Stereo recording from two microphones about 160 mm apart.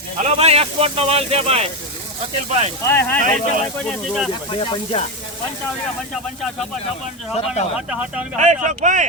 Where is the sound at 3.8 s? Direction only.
Centre (ahead or behind).